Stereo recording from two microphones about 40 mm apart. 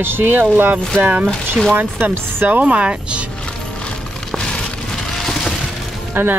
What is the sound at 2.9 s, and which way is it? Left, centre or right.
Speech, right.